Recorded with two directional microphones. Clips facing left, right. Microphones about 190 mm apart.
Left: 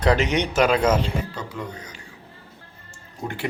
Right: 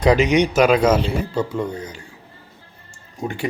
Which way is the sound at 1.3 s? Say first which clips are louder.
Right 10 dB; 30° right (ahead or behind).